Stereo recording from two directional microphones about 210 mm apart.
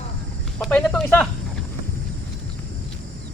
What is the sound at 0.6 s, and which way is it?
Speech, 5° left (ahead or behind).